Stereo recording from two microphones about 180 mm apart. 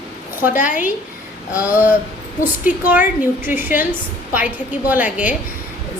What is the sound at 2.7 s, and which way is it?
A woman's voice, 10° right (ahead or behind).